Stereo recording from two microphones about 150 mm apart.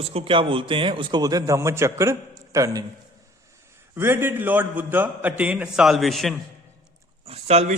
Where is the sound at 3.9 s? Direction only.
15° right (ahead or behind); by 6.3 s centre (ahead or behind).